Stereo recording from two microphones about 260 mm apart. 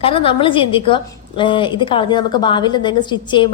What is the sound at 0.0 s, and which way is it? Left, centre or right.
A woman's voice, left.